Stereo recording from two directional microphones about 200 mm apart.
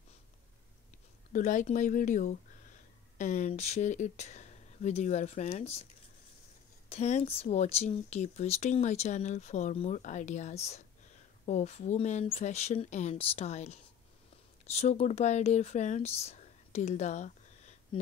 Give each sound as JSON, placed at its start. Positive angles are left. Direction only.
{"t": 1.3, "sound": "speech", "side_deg": 40}
{"t": 6.9, "sound": "speech", "side_deg": 35}